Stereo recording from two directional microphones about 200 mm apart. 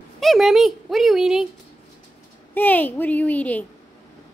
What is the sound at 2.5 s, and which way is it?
A woman's voice, 10° left (ahead or behind).